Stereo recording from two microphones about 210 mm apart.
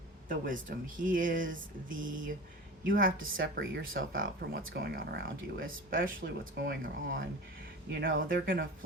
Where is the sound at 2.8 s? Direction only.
40° right (ahead or behind).